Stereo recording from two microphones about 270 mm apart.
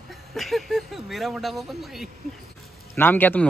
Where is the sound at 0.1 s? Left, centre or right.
Centre.